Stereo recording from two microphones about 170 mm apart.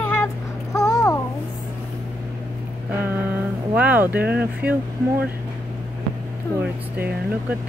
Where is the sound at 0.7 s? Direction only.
20° left (ahead or behind).